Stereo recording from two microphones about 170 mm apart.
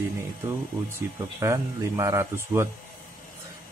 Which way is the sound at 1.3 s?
20° right (ahead or behind).